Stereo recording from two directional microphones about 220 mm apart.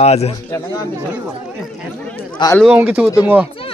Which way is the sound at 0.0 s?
30° left (ahead or behind).